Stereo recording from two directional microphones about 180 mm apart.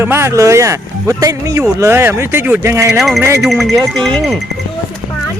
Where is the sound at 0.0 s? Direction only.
15° right (ahead or behind).